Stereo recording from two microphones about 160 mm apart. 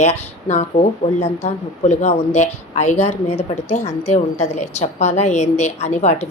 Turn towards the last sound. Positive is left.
turn(degrees=45)  # may be behind; listen again after turning